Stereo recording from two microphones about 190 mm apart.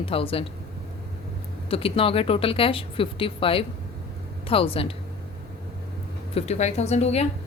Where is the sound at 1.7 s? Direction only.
30° left (ahead or behind).